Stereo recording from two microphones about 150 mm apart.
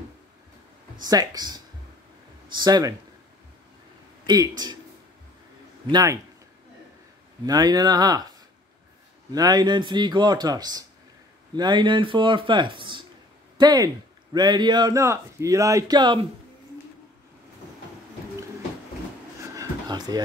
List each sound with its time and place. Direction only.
1.0 s a man's voice: 25° right (ahead or behind)
4.3 s a man's voice: 25° right (ahead or behind)
5.9 s a man's voice: 25° right (ahead or behind)
7.4 s a man's voice: 25° right (ahead or behind)
19.5 s a sound: 25° right (ahead or behind)